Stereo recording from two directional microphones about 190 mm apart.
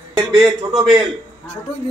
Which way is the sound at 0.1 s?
25° right (ahead or behind).